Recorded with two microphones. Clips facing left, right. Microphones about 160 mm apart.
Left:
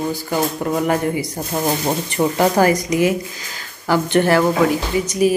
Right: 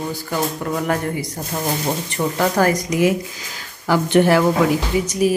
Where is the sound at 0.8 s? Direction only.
15° left (ahead or behind).